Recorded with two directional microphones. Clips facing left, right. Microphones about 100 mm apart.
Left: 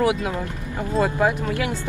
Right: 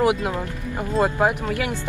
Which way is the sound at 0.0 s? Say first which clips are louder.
Right 1 dB; 20° right (ahead or behind).